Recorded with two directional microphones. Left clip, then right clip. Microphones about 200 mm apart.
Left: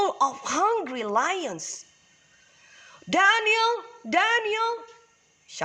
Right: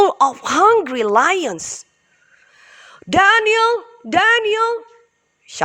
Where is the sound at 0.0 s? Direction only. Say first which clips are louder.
Right 10 dB; 45° right (ahead or behind).